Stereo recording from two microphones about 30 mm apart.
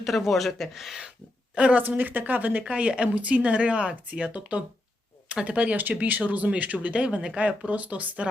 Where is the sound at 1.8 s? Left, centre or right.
Right.